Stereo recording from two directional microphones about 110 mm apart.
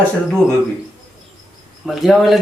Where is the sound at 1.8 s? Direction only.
Centre (ahead or behind).